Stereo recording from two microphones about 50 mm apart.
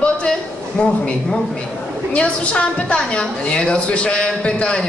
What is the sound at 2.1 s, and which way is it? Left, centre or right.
A woman's voice, left.